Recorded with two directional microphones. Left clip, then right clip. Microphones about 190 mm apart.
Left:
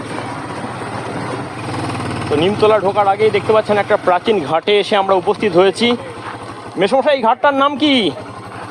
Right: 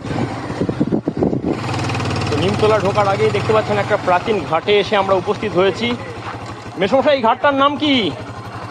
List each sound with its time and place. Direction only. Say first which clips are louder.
2.4 s speech: left 3 dB; 65° left (ahead or behind)